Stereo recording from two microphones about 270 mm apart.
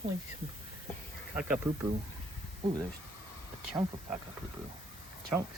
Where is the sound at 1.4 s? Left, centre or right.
Centre.